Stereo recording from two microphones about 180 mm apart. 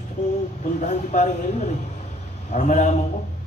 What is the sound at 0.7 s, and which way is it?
A woman's voice, 40° left (ahead or behind).